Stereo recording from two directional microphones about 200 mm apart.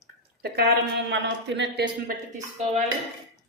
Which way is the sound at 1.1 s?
65° right (ahead or behind).